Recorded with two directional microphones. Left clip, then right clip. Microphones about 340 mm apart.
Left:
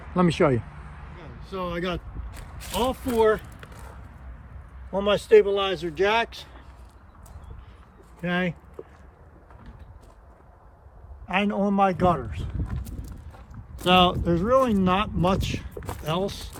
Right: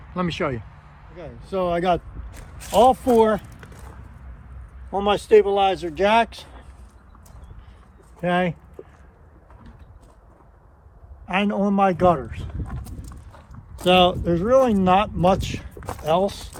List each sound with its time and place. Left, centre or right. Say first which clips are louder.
0.1 s speech: left 4 dB; centre
4.9 s speech: right 2 dB; centre
8.2 s speech: right 6 dB; centre
11.3 s speech: right 2 dB; centre
12.6 s a sound: right 1 dB; centre
13.8 s speech: right 3 dB; centre